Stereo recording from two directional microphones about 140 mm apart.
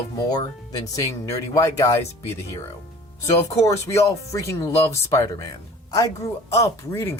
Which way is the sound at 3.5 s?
20° left (ahead or behind).